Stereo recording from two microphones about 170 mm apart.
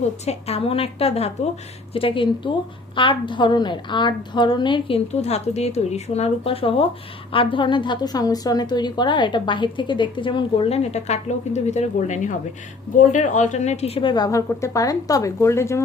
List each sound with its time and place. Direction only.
0.3 s a woman's voice: 35° left (ahead or behind); by 15.8 s 15° left (ahead or behind)